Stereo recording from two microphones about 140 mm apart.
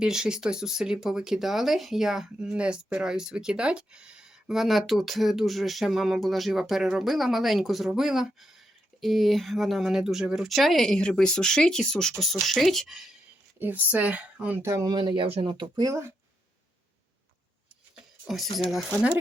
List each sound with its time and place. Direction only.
0.0 s speech: 5° right (ahead or behind)
13.6 s speech: 10° right (ahead or behind)
14.9 s speech: 35° right (ahead or behind)
17.9 s a sound: centre (ahead or behind)
18.5 s speech: centre (ahead or behind)